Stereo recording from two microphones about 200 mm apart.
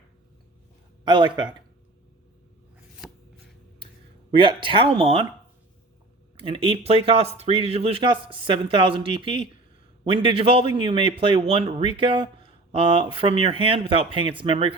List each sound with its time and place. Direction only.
1.0 s speech: 25° right (ahead or behind)
3.0 s shuffling cards: centre (ahead or behind)
4.4 s speech: 25° right (ahead or behind)
6.3 s speech: 25° right (ahead or behind)